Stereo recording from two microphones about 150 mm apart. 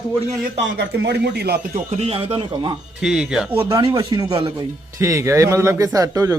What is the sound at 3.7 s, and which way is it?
Speech, 25° right (ahead or behind).